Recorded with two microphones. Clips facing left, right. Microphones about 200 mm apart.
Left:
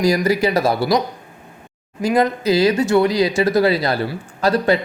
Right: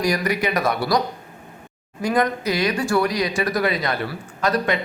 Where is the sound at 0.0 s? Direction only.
30° left (ahead or behind).